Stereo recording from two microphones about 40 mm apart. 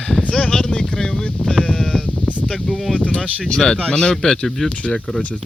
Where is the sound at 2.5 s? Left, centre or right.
Centre.